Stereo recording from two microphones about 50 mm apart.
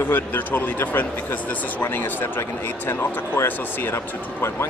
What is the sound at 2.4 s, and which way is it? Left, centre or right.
Speech, left.